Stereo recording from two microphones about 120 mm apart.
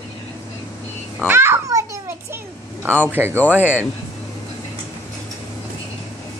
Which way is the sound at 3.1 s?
20° right (ahead or behind).